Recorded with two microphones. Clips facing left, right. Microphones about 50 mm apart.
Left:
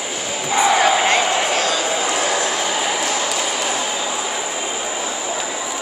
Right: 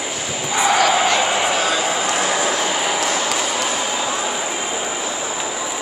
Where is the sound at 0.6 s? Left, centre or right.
Left.